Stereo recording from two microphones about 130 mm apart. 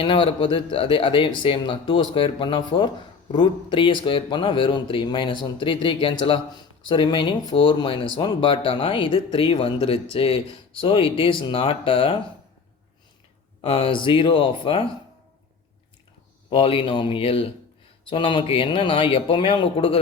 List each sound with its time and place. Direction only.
0.0 s a man's voice: 40° left (ahead or behind)
13.6 s speech: 45° left (ahead or behind)
16.5 s a man's voice: 45° left (ahead or behind)